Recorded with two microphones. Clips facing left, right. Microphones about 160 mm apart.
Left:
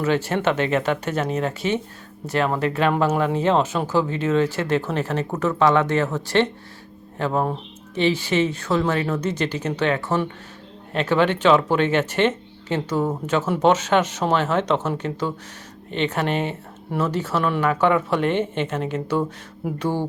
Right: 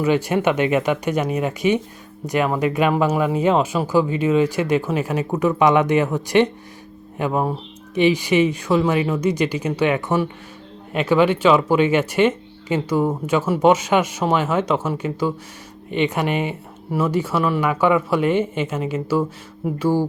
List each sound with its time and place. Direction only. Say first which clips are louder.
0.0 s speech: right 3 dB; 10° right (ahead or behind)